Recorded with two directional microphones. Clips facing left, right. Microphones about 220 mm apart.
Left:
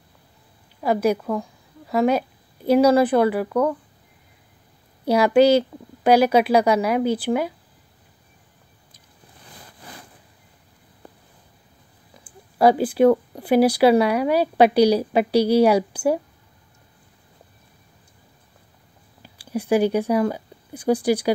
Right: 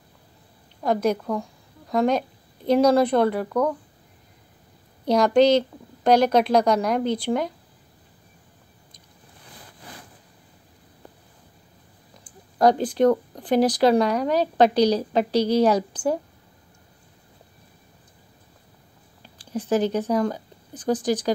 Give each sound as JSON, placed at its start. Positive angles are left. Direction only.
{"t": 0.8, "sound": "a woman's voice", "side_deg": 5}
{"t": 5.0, "sound": "speech", "side_deg": 5}
{"t": 12.2, "sound": "speech", "side_deg": 5}
{"t": 19.2, "sound": "speech", "side_deg": 10}